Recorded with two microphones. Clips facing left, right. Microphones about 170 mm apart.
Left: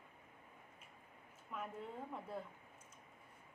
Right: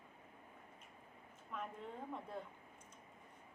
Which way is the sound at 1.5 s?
5° left (ahead or behind).